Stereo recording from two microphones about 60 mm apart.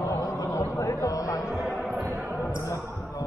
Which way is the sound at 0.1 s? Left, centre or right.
Left.